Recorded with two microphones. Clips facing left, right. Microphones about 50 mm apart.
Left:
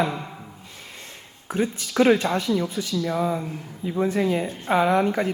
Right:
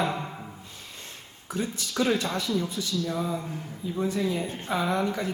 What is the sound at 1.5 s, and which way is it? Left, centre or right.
A man's voice, left.